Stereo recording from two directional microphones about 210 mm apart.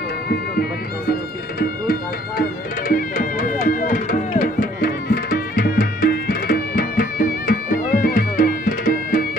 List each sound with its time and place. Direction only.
1.6 s speech: 45° left (ahead or behind)
2.9 s music: 40° left (ahead or behind)